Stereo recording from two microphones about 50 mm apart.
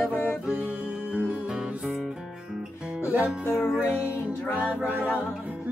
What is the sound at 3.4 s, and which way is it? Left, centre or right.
Music, left.